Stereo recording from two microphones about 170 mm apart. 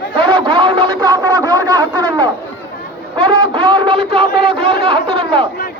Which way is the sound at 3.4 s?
30° right (ahead or behind).